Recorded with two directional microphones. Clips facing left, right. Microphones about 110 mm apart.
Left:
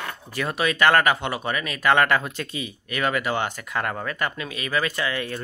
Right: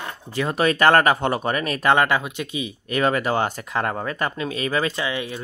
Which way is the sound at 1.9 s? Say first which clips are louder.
Even; 20° right (ahead or behind).